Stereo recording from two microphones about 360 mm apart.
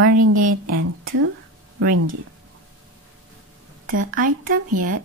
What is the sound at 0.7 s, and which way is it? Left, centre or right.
Speech, right.